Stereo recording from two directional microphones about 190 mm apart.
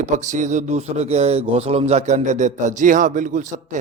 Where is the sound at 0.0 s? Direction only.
40° right (ahead or behind).